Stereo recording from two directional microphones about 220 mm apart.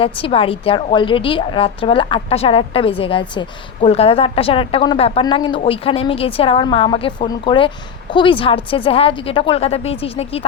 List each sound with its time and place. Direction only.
0.0 s a woman's voice: 25° left (ahead or behind)